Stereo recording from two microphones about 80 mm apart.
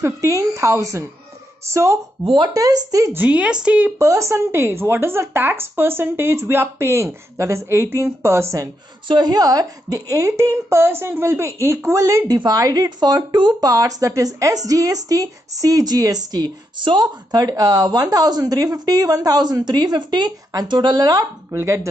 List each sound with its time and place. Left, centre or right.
0.0 s speech: right
2.2 s speech: right
2.5 s speech: right
3.1 s speech: centre
4.0 s speech: right
9.0 s speech: right
12.5 s speech: right
21.5 s speech: right